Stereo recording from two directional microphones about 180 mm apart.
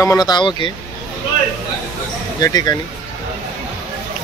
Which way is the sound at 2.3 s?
20° left (ahead or behind).